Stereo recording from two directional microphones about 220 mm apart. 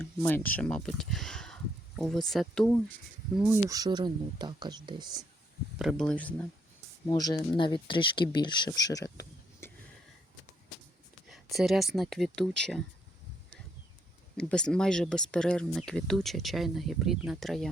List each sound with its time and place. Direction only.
0.0 s speech: 10° left (ahead or behind)
3.5 s speech: 15° right (ahead or behind)
5.8 s speech: centre (ahead or behind)
7.1 s speech: 15° left (ahead or behind)
11.3 s speech: centre (ahead or behind)
14.3 s speech: 5° left (ahead or behind)